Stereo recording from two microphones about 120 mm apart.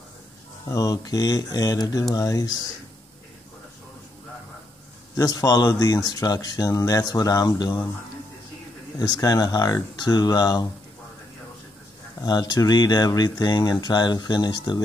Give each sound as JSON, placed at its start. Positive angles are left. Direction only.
{"t": 0.7, "sound": "speech", "side_deg": 30}
{"t": 5.1, "sound": "speech", "side_deg": 30}
{"t": 8.9, "sound": "speech", "side_deg": 30}
{"t": 12.2, "sound": "speech", "side_deg": 30}